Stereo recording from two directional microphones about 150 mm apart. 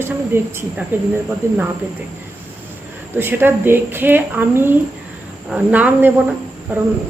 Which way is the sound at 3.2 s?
15° right (ahead or behind).